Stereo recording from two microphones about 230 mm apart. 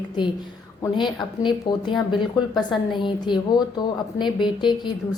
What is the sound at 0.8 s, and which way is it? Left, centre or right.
A woman's voice, centre.